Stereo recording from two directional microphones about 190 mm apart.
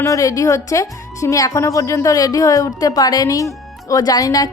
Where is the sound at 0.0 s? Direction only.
15° left (ahead or behind).